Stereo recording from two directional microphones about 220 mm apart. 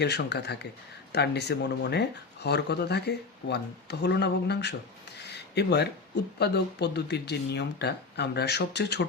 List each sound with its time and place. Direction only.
0.0 s speech: 50° left (ahead or behind)
5.3 s a sound: 50° left (ahead or behind)
6.4 s speech: 50° left (ahead or behind)